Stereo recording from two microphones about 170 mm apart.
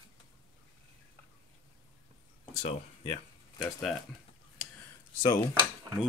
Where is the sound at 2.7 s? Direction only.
30° left (ahead or behind).